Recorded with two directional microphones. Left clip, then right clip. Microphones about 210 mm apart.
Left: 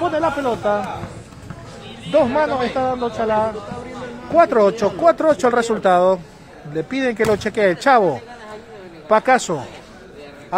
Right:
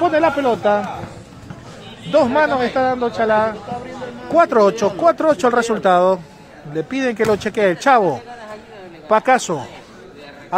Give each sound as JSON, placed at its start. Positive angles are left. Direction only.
{"t": 0.1, "sound": "speech", "side_deg": -25}
{"t": 2.1, "sound": "speech", "side_deg": -15}